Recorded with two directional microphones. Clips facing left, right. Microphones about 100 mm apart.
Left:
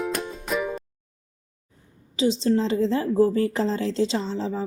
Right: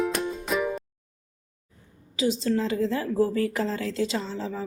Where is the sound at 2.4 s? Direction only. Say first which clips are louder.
Left 3 dB; 30° left (ahead or behind).